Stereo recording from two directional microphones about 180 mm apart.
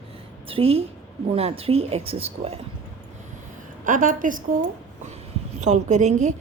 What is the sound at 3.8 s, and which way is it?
Speech, 45° right (ahead or behind).